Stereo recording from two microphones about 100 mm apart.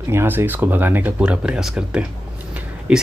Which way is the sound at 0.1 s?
25° right (ahead or behind).